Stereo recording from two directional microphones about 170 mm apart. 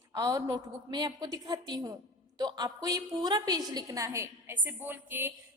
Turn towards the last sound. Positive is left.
turn(degrees=-10)  # may be behind; listen again after turning